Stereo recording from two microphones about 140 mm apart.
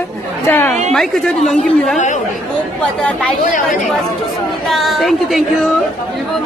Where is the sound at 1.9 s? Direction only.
60° left (ahead or behind).